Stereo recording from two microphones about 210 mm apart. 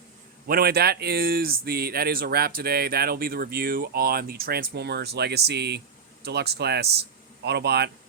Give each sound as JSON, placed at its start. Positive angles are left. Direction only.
{"t": 0.4, "sound": "speech", "side_deg": -45}